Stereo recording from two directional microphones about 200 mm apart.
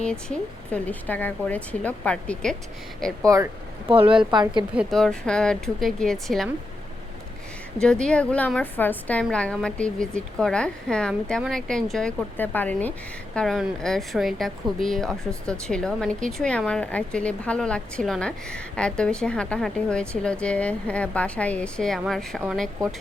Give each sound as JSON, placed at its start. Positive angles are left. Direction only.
{"t": 0.0, "sound": "speech", "side_deg": 5}
{"t": 3.2, "sound": "speech", "side_deg": -15}
{"t": 3.8, "sound": "a woman's voice", "side_deg": -25}
{"t": 4.1, "sound": "a woman's voice", "side_deg": -5}
{"t": 7.8, "sound": "a woman's voice", "side_deg": 5}